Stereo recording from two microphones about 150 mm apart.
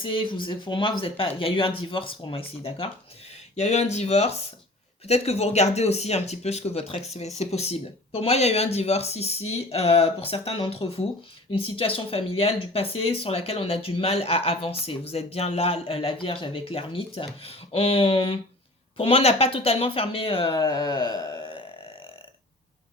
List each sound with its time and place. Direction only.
0.0 s speech: 35° left (ahead or behind)
20.6 s speech: 25° left (ahead or behind)